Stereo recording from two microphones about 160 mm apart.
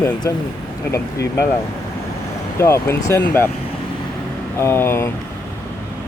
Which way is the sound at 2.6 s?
15° left (ahead or behind).